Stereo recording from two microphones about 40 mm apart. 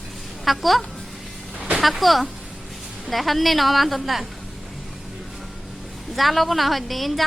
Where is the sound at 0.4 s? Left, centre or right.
Centre.